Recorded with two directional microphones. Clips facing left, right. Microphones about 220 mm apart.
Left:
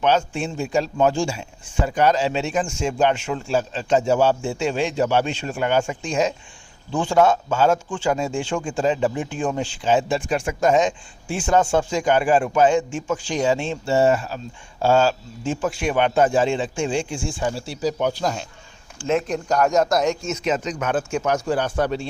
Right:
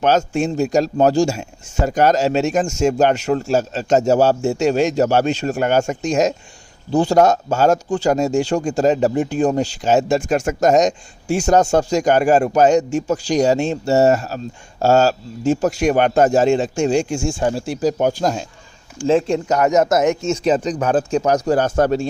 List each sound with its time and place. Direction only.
0.0 s speech: 40° right (ahead or behind)
19.0 s speech: 30° right (ahead or behind); by 22.0 s 45° right (ahead or behind)